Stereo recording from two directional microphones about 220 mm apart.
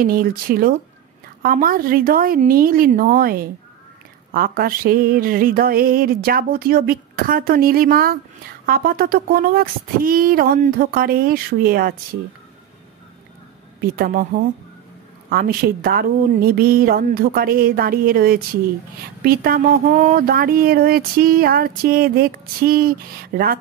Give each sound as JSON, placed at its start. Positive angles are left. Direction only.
{"t": 0.0, "sound": "speech", "side_deg": -40}
{"t": 13.7, "sound": "a woman's voice", "side_deg": -45}